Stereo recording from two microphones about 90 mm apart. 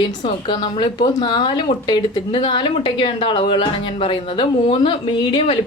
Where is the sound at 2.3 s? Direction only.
65° left (ahead or behind).